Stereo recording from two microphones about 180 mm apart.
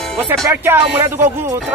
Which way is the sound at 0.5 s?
10° right (ahead or behind).